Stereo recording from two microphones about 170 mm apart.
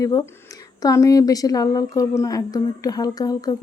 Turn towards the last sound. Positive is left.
turn(degrees=20)  # may be behind; listen again after turning